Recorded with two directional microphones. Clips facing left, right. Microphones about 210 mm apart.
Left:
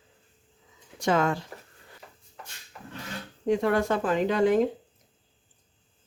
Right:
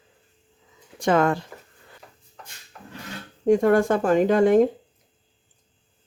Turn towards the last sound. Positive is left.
turn(degrees=-50)  # may be behind; listen again after turning